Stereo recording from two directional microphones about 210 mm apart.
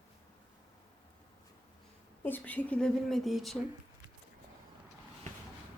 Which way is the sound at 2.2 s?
10° left (ahead or behind).